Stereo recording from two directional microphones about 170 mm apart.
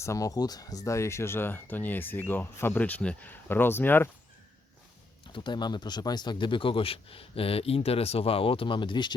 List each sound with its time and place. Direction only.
0.0 s speech: 20° left (ahead or behind)
5.3 s speech: 25° left (ahead or behind)